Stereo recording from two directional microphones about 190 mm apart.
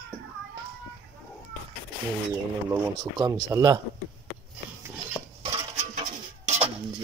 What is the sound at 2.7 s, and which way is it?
Speech, 20° right (ahead or behind).